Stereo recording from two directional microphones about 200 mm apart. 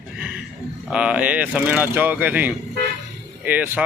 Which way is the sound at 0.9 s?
5° right (ahead or behind).